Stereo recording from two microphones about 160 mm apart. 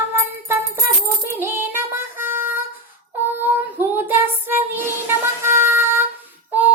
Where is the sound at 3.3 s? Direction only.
10° right (ahead or behind).